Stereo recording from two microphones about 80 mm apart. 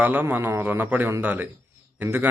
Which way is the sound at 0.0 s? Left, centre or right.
Right.